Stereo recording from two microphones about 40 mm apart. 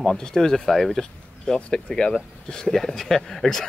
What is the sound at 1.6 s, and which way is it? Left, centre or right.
Speech, left.